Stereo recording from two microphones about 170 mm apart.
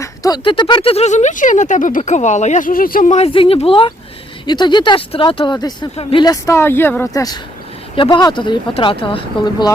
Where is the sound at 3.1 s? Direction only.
35° left (ahead or behind).